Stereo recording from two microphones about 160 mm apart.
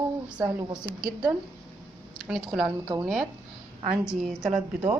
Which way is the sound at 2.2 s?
Centre (ahead or behind).